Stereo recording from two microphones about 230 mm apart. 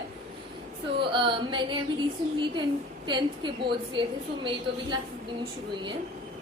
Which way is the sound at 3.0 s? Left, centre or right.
Right.